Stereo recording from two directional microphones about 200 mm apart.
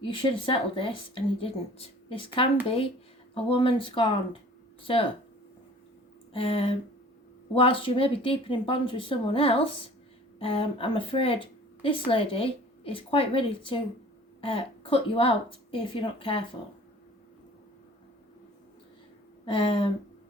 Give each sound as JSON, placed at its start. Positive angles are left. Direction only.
{"t": 0.0, "sound": "a woman's voice", "side_deg": 25}
{"t": 6.3, "sound": "a woman's voice", "side_deg": 30}
{"t": 19.5, "sound": "a woman's voice", "side_deg": 25}